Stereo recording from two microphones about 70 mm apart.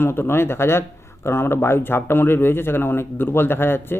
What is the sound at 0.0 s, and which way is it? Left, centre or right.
Speech, left.